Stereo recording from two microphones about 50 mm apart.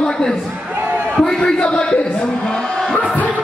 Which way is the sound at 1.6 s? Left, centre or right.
Left.